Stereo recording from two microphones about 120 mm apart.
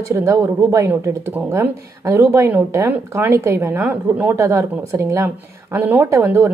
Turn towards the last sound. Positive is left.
turn(degrees=-20)  # may be behind; listen again after turning